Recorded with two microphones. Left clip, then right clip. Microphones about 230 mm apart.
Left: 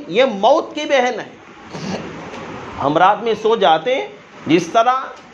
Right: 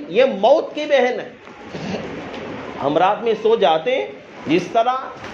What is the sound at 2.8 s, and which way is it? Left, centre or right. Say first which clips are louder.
A man's voice: left 3 dB; left.